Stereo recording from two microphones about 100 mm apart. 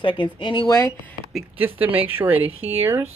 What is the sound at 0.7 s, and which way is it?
Speech, 35° left (ahead or behind).